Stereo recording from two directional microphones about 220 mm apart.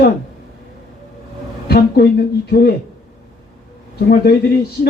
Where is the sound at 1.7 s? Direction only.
45° left (ahead or behind).